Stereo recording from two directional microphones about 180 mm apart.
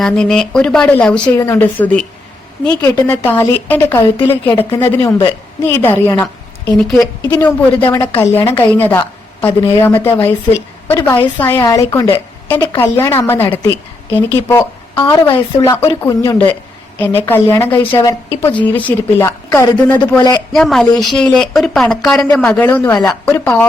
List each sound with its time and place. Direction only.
0.0 s a woman's voice: 5° left (ahead or behind)
15.3 s a woman's voice: 25° left (ahead or behind)
20.5 s speech: centre (ahead or behind)